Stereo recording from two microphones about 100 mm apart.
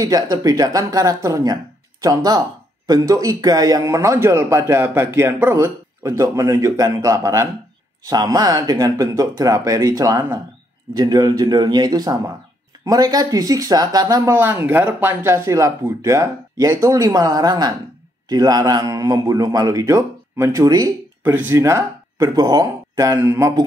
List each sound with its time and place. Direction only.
0.0 s a man's voice: 40° right (ahead or behind)
14.3 s a man's voice: 20° right (ahead or behind); by 20.9 s 40° right (ahead or behind)
21.2 s a man's voice: 20° right (ahead or behind)